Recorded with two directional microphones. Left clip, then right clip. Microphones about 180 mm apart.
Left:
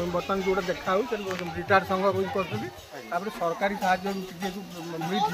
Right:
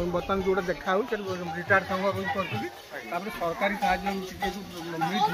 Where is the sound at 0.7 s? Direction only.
10° right (ahead or behind).